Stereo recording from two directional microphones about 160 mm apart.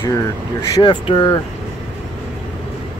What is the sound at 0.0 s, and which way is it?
Speech, 20° left (ahead or behind).